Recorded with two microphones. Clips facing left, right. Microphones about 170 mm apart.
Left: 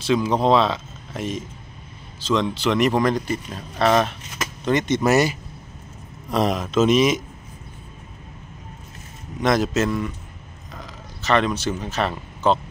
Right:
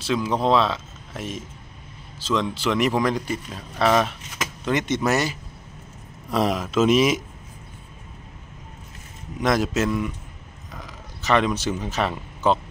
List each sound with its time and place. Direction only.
0.0 s speech: 5° right (ahead or behind)
5.1 s speech: 10° left (ahead or behind)
6.3 s speech: 5° right (ahead or behind)
9.4 s a man's voice: 5° right (ahead or behind)
10.7 s a sound: 10° right (ahead or behind)